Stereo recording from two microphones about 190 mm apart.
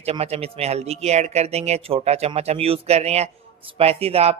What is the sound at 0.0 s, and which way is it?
Speech, 35° right (ahead or behind).